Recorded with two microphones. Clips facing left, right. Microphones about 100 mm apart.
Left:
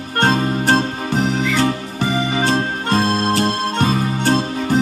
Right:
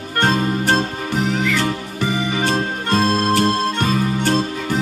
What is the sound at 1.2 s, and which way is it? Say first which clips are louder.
Music: left 2 dB; 30° left (ahead or behind).